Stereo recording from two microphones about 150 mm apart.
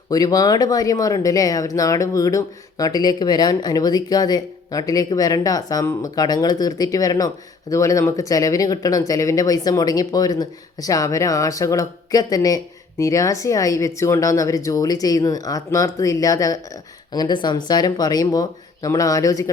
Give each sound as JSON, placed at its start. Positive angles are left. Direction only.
{"t": 0.1, "sound": "speech", "side_deg": 25}